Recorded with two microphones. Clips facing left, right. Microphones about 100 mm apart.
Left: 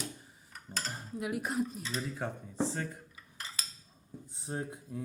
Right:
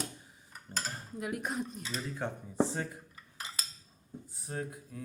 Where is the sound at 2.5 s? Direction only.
15° right (ahead or behind).